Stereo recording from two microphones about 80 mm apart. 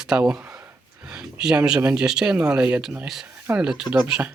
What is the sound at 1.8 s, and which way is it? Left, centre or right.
Speech, centre.